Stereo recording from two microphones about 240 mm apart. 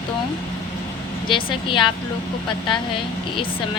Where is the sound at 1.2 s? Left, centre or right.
Left.